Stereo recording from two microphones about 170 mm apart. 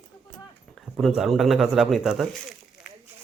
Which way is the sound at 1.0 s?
Centre (ahead or behind).